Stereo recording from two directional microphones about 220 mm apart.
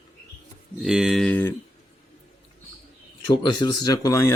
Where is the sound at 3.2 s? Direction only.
20° left (ahead or behind).